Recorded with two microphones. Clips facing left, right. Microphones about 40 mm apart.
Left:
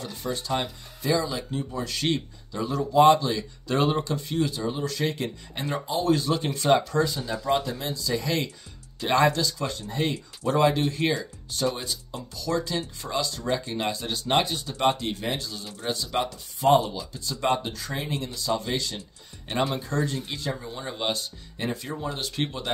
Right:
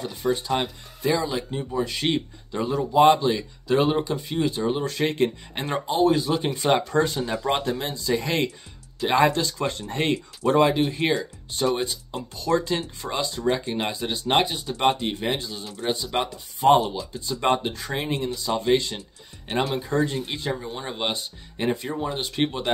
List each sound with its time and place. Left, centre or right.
0.0 s speech: centre
3.6 s speech: centre
4.5 s speech: right
6.0 s speech: centre
6.9 s speech: right
9.0 s speech: centre
9.3 s speech: right
10.7 s speech: centre
11.7 s speech: right
13.9 s speech: centre
16.6 s speech: right
17.1 s speech: right
18.2 s speech: right